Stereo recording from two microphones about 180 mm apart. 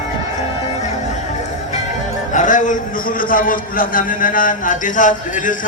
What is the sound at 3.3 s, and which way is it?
Speech, 50° left (ahead or behind).